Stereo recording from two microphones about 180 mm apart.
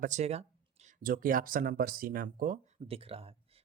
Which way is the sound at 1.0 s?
50° right (ahead or behind).